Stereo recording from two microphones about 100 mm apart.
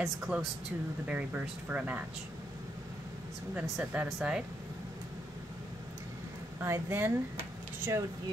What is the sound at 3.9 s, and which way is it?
Speech, 10° right (ahead or behind).